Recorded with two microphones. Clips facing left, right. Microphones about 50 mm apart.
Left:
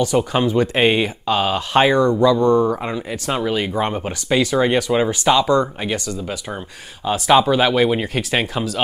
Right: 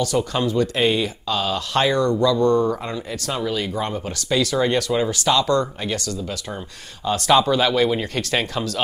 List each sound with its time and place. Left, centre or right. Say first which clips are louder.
0.0 s speech: left 4 dB; left